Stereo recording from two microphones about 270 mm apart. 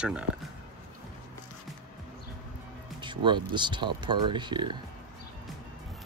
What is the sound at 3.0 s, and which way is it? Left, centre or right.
Speech, centre.